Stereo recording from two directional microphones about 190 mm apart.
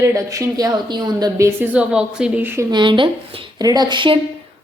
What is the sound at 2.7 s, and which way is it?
Speech, 25° right (ahead or behind).